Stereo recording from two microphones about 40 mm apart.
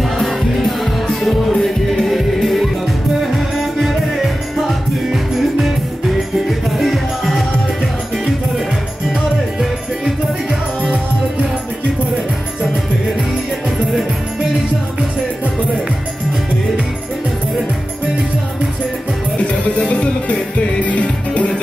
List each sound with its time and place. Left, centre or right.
0.0 s music: centre
9.1 s music: centre
19.9 s music: left